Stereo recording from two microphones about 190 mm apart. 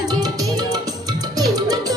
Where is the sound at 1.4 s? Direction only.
20° right (ahead or behind).